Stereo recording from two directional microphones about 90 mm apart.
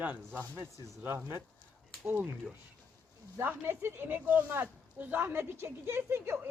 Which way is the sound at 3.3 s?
25° right (ahead or behind).